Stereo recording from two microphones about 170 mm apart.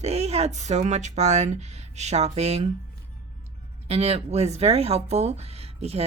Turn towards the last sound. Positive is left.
turn(degrees=-35)  # may be behind; listen again after turning